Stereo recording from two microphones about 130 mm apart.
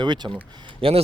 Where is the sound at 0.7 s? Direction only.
45° right (ahead or behind).